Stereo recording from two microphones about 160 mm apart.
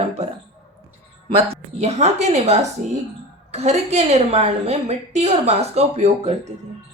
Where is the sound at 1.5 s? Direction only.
40° right (ahead or behind).